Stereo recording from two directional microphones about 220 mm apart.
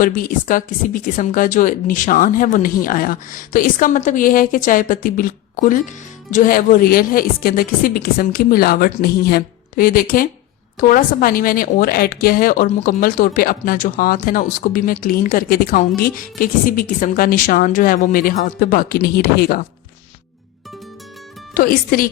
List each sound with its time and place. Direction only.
0.0 s a woman's voice: 40° left (ahead or behind)
21.5 s a woman's voice: 40° left (ahead or behind)